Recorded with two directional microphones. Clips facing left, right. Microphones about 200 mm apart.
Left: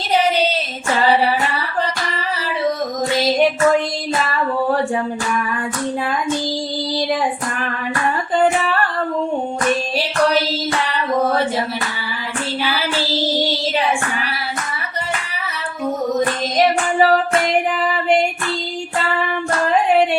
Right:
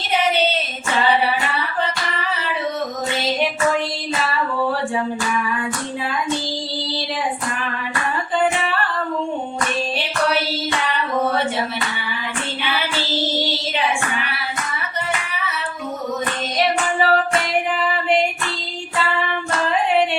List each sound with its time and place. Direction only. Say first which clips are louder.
16.6 s child singing: left 4 dB; 45° left (ahead or behind)